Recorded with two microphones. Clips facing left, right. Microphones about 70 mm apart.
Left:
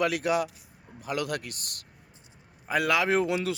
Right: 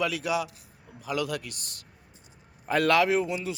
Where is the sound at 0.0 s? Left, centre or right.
Left.